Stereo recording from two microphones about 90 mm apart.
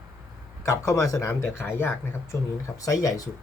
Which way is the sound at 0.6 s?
30° left (ahead or behind).